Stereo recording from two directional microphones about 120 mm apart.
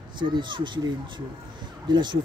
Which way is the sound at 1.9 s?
40° right (ahead or behind).